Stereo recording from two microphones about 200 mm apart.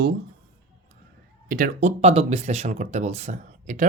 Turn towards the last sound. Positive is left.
turn(degrees=-35)  # may be behind; listen again after turning